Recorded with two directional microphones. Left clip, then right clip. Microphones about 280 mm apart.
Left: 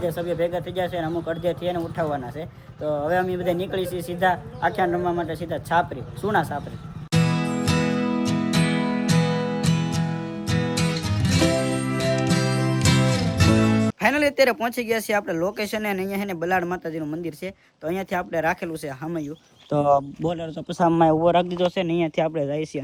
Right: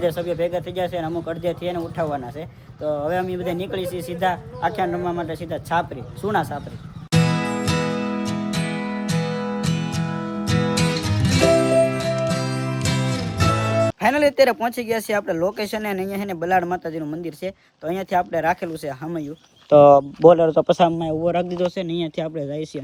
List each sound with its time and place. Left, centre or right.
0.1 s a man's voice: centre
7.1 s music: centre
20.2 s speech: centre
21.2 s a man's voice: centre